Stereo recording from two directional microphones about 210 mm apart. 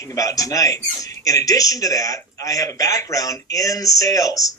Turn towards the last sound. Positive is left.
turn(degrees=15)  # may be behind; listen again after turning